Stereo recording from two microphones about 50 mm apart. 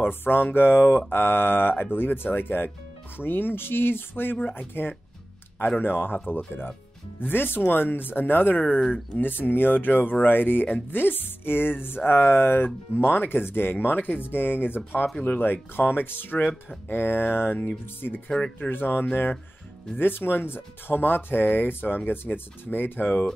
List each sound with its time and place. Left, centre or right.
0.0 s speech: left